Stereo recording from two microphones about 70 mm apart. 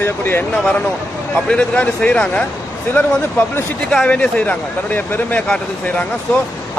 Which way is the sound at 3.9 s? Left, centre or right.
Centre.